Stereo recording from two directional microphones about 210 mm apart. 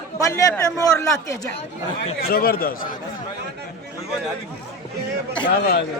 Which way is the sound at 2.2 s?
45° left (ahead or behind).